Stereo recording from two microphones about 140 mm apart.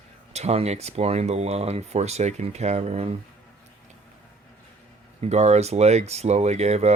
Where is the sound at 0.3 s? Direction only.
50° right (ahead or behind).